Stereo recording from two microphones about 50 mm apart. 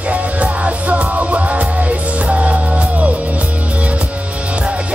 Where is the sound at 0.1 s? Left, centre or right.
Right.